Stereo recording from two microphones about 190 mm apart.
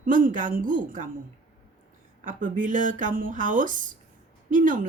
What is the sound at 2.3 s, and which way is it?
Speech, 45° right (ahead or behind).